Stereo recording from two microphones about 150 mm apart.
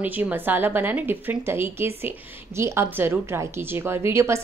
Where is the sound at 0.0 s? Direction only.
10° right (ahead or behind).